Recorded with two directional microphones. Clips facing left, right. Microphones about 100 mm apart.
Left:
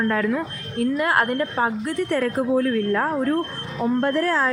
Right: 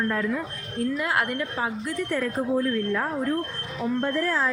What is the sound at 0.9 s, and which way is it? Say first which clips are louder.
A woman's voice: left 6 dB; 50° left (ahead or behind).